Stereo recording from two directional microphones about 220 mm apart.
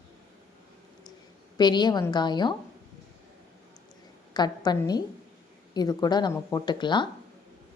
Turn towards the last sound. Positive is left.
turn(degrees=20)  # may be behind; listen again after turning